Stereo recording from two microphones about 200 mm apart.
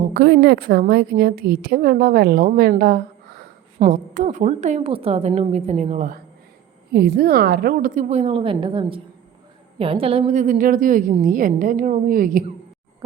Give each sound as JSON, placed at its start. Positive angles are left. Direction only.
{"t": 0.1, "sound": "a woman's voice", "side_deg": -55}
{"t": 3.8, "sound": "a woman's voice", "side_deg": -40}
{"t": 6.9, "sound": "a woman's voice", "side_deg": -50}